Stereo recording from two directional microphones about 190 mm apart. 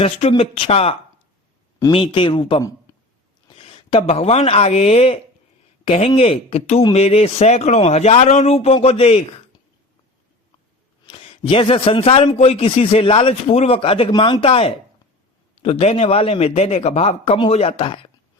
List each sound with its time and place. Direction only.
0.0 s a man's voice: 30° left (ahead or behind)
11.1 s a man's voice: 25° left (ahead or behind)